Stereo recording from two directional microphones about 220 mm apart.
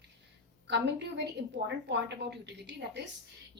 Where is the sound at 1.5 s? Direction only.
50° right (ahead or behind).